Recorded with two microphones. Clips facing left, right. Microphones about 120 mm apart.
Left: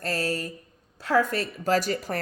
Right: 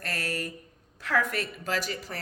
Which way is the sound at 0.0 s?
30° left (ahead or behind).